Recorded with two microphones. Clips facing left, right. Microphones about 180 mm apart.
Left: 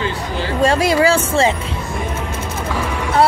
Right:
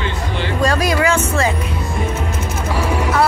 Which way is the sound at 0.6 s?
25° left (ahead or behind).